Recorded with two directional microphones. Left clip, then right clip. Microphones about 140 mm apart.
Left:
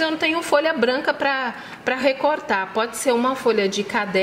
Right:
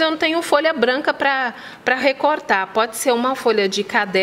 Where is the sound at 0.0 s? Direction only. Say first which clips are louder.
Right 3 dB; 30° right (ahead or behind).